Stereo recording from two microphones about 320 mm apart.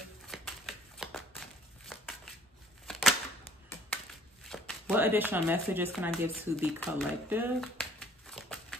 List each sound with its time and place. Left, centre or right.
0.3 s a sound: centre
4.5 s speech: centre
8.3 s typewriter: centre